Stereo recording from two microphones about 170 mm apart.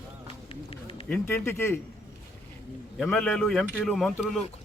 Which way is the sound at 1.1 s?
10° left (ahead or behind).